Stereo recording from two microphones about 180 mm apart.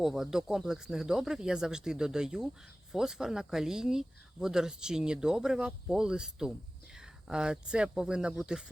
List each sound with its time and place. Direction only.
0.0 s speech: centre (ahead or behind)